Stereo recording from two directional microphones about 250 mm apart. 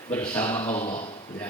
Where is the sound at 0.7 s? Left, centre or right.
Left.